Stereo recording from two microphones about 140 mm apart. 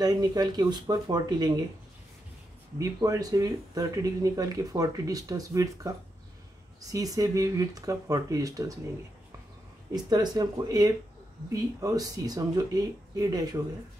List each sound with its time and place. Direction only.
0.0 s speech: 30° right (ahead or behind)
2.8 s speech: 25° right (ahead or behind)
10.0 s speech: 30° right (ahead or behind)